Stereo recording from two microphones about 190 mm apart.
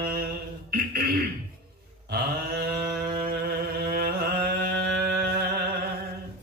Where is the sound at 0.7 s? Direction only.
55° right (ahead or behind).